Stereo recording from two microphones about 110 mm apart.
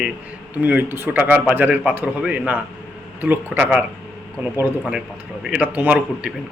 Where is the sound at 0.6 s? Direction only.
15° right (ahead or behind).